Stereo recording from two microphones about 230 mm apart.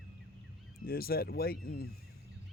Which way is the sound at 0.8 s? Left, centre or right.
Left.